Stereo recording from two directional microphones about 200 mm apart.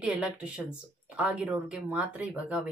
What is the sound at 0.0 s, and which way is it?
Speech, 5° right (ahead or behind).